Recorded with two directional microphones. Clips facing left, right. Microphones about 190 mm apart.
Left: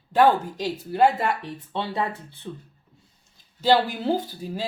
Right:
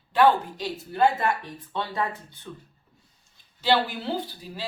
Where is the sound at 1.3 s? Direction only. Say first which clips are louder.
Left 2 dB; 25° left (ahead or behind).